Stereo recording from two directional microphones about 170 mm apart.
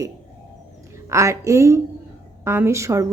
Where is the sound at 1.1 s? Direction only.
15° right (ahead or behind).